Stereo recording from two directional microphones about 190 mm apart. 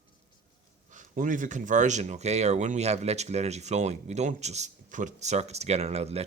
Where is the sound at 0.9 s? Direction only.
40° right (ahead or behind).